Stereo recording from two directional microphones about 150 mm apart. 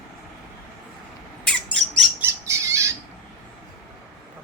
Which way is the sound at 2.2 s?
20° right (ahead or behind).